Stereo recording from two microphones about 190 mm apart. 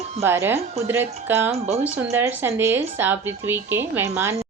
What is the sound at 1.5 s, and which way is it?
Speech, 35° right (ahead or behind).